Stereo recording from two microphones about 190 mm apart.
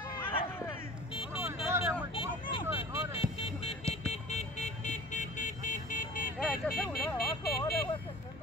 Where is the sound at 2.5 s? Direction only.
25° left (ahead or behind); by 6.3 s 45° left (ahead or behind).